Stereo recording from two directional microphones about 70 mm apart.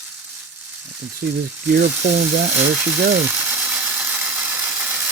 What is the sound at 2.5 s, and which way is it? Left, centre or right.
Ratchet, right.